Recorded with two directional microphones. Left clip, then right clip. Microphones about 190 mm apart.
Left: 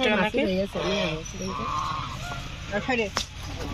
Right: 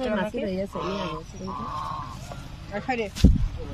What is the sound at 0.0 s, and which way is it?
Speech, 40° left (ahead or behind).